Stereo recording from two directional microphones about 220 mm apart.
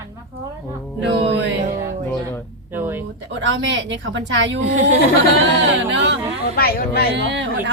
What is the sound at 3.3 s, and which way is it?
A woman's voice, 55° right (ahead or behind).